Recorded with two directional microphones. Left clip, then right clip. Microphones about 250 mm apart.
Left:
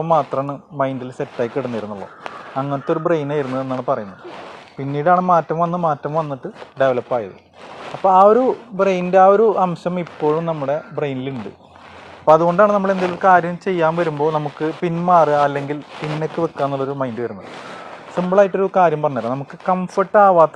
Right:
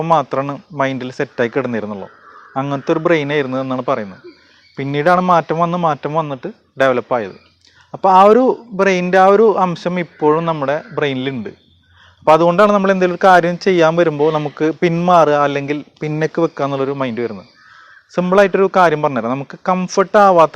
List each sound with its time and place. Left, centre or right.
0.2 s a man's voice: right
13.1 s a man's voice: right
15.2 s a man's voice: right